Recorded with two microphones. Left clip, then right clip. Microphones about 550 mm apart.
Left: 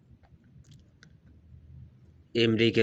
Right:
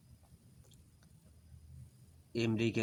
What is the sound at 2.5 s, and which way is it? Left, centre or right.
Speech, right.